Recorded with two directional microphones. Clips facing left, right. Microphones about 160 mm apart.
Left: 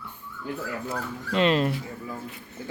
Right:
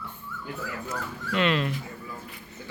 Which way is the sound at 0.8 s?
35° left (ahead or behind).